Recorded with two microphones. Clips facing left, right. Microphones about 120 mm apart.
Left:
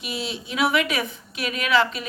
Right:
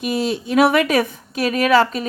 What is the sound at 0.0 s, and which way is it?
A woman's voice, 50° right (ahead or behind).